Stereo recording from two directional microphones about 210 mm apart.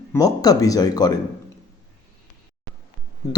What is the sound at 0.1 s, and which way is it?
A man's voice, 15° left (ahead or behind).